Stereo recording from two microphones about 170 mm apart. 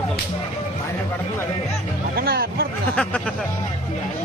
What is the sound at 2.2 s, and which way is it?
Hubbub, 65° right (ahead or behind).